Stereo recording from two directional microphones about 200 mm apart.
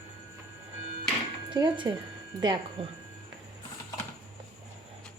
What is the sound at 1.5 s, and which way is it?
Speech, 20° right (ahead or behind).